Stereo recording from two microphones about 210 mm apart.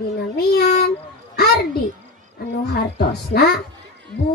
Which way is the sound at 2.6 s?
50° left (ahead or behind).